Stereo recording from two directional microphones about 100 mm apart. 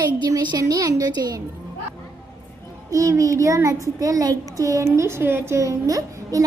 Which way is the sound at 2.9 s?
30° right (ahead or behind).